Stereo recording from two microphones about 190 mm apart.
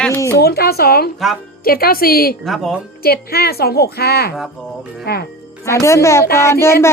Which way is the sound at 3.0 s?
55° left (ahead or behind).